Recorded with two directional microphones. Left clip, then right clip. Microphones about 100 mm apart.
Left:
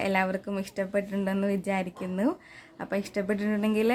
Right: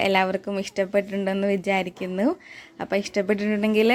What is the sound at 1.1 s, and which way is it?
Speech, 20° right (ahead or behind).